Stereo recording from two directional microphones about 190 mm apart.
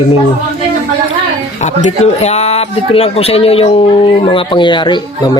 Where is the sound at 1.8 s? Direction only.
35° left (ahead or behind).